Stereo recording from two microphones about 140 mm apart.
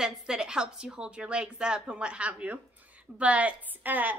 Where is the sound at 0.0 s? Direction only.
5° right (ahead or behind).